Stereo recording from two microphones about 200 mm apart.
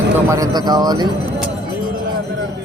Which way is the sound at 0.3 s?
20° right (ahead or behind).